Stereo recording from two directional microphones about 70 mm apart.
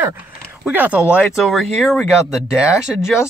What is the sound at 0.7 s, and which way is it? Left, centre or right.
Speech, right.